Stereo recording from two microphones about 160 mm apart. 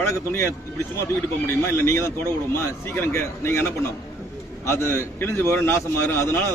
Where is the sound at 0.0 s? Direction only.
15° left (ahead or behind).